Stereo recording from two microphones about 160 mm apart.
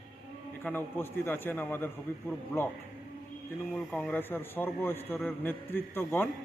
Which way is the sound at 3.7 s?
5° left (ahead or behind).